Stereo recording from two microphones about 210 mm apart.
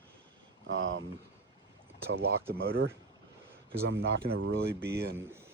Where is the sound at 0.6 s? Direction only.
65° right (ahead or behind).